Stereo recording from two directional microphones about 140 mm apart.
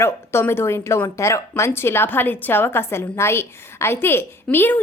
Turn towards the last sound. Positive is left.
turn(degrees=15)  # may be behind; listen again after turning